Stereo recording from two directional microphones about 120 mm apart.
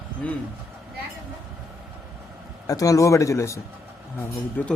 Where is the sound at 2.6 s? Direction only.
30° left (ahead or behind).